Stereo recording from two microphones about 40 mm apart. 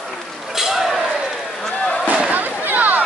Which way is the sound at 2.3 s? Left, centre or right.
Right.